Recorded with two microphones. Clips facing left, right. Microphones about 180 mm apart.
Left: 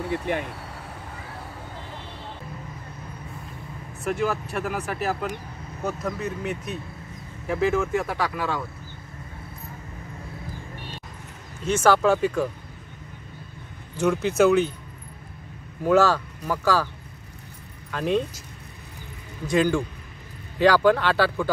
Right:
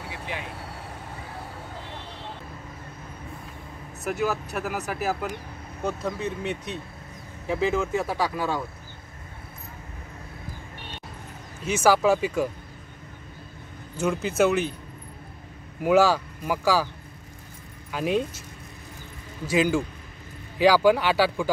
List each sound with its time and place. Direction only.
0.1 s speech: 55° left (ahead or behind)
4.0 s speech: 5° right (ahead or behind)
6.0 s speech: 30° right (ahead or behind)
7.4 s speech: centre (ahead or behind)
11.6 s speech: 10° right (ahead or behind)
14.0 s speech: centre (ahead or behind)
15.8 s speech: 10° right (ahead or behind)
17.9 s speech: 10° right (ahead or behind)
19.4 s speech: 5° right (ahead or behind)